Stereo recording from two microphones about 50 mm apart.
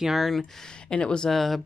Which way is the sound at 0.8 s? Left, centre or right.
Centre.